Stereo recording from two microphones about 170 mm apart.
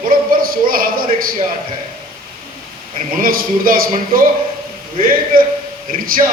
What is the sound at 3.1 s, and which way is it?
A man's voice, 55° right (ahead or behind).